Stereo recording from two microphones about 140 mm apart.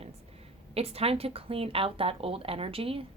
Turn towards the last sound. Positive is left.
turn(degrees=-40)  # may be behind; listen again after turning